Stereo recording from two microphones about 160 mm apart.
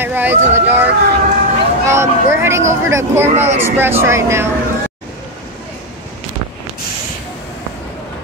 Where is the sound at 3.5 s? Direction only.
15° right (ahead or behind).